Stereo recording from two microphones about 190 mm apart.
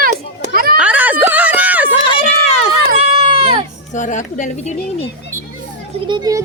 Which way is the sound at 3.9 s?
40° left (ahead or behind).